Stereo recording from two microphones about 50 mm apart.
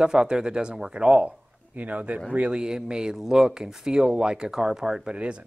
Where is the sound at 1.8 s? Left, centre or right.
Right; by 5.1 s centre.